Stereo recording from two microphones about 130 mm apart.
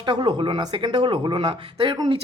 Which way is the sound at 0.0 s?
35° right (ahead or behind).